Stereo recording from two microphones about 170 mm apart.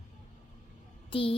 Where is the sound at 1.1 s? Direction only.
30° left (ahead or behind).